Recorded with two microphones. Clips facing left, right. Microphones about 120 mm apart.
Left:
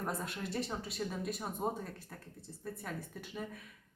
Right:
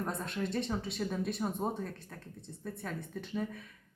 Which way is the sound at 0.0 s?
5° left (ahead or behind).